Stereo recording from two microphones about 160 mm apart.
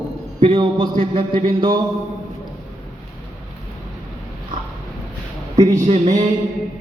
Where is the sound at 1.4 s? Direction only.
30° right (ahead or behind).